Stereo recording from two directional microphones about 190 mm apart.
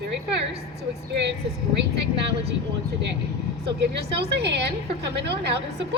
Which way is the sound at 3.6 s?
60° right (ahead or behind).